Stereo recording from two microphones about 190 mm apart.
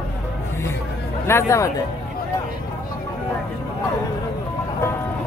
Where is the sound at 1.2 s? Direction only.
15° left (ahead or behind).